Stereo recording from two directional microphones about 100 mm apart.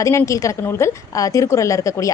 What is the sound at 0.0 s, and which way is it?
A woman's voice, 30° left (ahead or behind).